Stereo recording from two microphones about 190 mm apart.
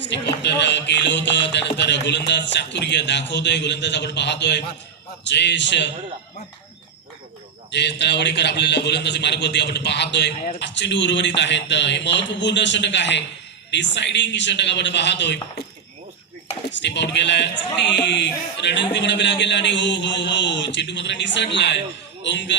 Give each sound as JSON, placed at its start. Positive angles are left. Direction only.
{"t": 0.0, "sound": "music", "side_deg": 65}
{"t": 7.7, "sound": "a man's voice", "side_deg": 65}
{"t": 10.6, "sound": "music", "side_deg": 70}
{"t": 16.7, "sound": "music", "side_deg": 65}